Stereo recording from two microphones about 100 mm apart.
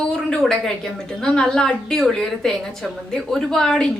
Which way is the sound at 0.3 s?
5° left (ahead or behind).